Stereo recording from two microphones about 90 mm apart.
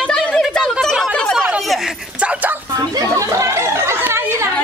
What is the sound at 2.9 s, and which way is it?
Chatter, 40° right (ahead or behind).